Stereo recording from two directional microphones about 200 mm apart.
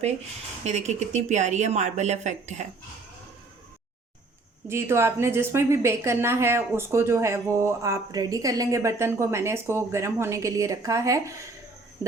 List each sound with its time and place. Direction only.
0.6 s a woman's voice: 35° right (ahead or behind)
4.7 s a woman's voice: 15° right (ahead or behind)